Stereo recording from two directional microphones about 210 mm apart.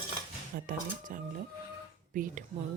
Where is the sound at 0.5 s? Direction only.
40° right (ahead or behind).